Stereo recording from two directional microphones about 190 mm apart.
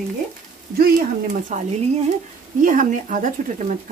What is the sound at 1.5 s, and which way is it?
Speech, 40° right (ahead or behind).